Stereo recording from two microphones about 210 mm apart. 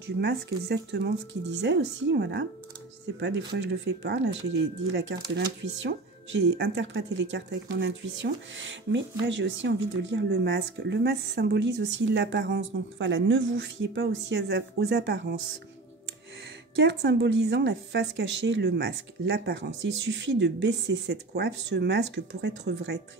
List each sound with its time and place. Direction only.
0.0 s speech: 50° right (ahead or behind)
3.5 s speech: 55° right (ahead or behind)
16.7 s speech: 55° right (ahead or behind)